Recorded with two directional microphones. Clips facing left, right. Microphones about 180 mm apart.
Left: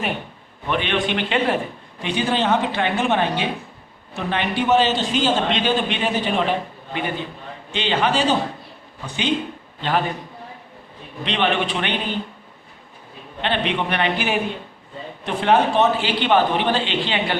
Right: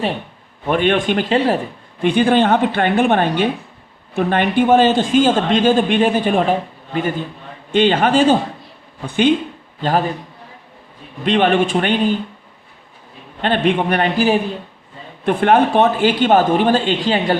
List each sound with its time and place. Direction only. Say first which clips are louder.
0.7 s speech: right 6 dB; 45° right (ahead or behind)
2.0 s speech: right 8 dB; 55° right (ahead or behind)
9.8 s a man's voice: right 4 dB; 40° right (ahead or behind)
11.3 s speech: right 7 dB; 45° right (ahead or behind)
13.4 s speech: right 6 dB; 45° right (ahead or behind)
15.2 s speech: right 5 dB; 55° right (ahead or behind)